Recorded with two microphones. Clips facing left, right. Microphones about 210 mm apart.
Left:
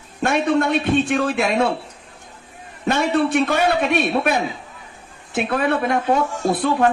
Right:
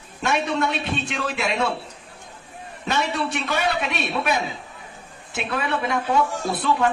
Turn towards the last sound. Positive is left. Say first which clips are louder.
# left 4 dB
turn(degrees=50)  # may be behind; listen again after turning